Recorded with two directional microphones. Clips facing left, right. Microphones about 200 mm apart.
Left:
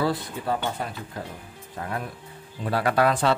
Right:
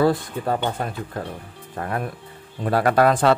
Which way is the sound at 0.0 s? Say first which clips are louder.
Right 6 dB; 50° right (ahead or behind).